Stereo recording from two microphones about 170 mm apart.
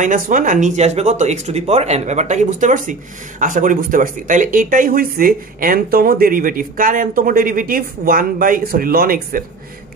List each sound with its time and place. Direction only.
0.0 s speech: 50° right (ahead or behind)